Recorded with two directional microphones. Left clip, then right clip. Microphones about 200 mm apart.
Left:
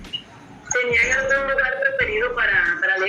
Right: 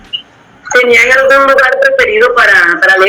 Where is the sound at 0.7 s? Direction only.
50° right (ahead or behind).